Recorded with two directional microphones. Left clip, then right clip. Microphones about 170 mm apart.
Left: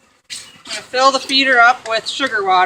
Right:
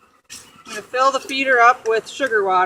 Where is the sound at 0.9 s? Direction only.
30° left (ahead or behind).